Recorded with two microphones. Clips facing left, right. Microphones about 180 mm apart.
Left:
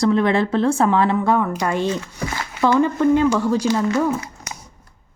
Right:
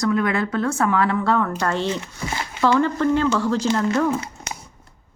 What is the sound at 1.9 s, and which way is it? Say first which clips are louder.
Speech: left 2 dB; 20° right (ahead or behind).